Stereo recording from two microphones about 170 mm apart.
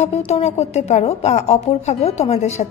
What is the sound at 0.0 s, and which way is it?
A woman's voice, 40° left (ahead or behind).